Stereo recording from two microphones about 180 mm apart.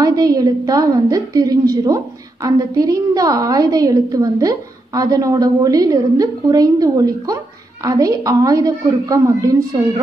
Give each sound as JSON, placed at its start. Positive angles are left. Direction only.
{"t": 0.0, "sound": "a woman's voice", "side_deg": -20}